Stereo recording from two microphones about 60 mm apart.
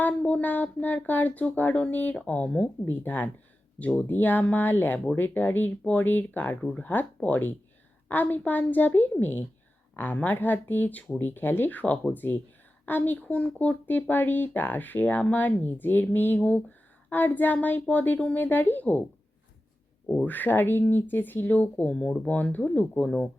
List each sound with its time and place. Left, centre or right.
0.0 s speech: left
2.8 s speech: left
6.7 s speech: left
13.8 s speech: left
20.2 s speech: left
21.8 s speech: centre
22.4 s speech: left